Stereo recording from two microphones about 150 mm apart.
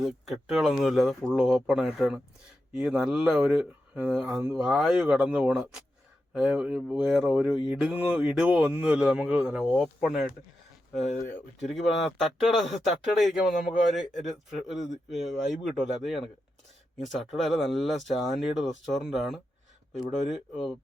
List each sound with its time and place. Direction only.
0.0 s speech: centre (ahead or behind)
11.0 s speech: 60° left (ahead or behind)
11.7 s speech: centre (ahead or behind)